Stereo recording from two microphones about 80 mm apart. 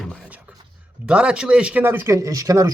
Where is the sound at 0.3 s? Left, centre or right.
Centre.